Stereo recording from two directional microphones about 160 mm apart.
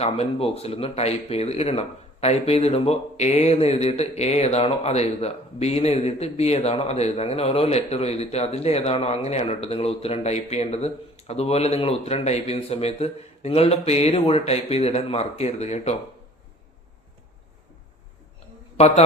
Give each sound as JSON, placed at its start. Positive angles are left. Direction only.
{"t": 0.0, "sound": "speech", "side_deg": 40}
{"t": 18.8, "sound": "speech", "side_deg": 40}